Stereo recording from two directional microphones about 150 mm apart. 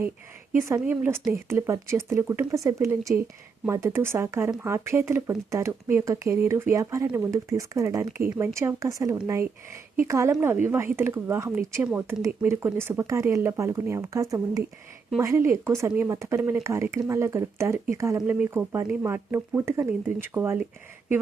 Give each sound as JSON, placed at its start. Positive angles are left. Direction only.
{"t": 0.5, "sound": "a woman's voice", "side_deg": -15}